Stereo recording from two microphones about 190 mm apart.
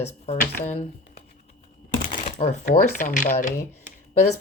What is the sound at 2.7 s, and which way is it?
Speech, 40° left (ahead or behind).